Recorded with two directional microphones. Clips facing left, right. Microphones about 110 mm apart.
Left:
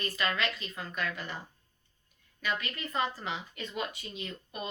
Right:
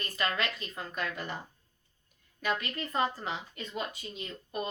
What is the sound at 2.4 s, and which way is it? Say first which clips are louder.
Speech: right 2 dB; 50° right (ahead or behind).